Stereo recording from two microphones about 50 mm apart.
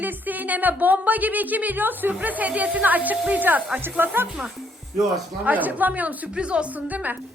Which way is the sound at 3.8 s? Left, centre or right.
Right.